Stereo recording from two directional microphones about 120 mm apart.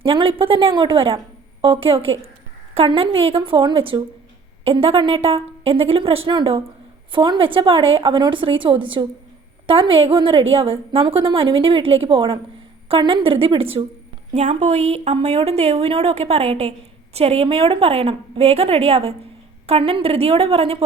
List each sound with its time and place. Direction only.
0.0 s a woman's voice: 50° right (ahead or behind)
14.3 s a woman's voice: 70° right (ahead or behind)